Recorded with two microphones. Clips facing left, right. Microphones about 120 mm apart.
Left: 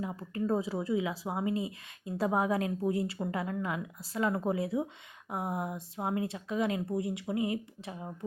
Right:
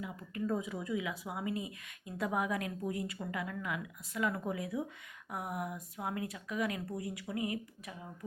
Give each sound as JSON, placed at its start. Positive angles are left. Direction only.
{"t": 0.0, "sound": "speech", "side_deg": 35}